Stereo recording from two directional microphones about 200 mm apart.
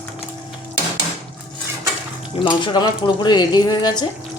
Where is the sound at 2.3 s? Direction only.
25° left (ahead or behind).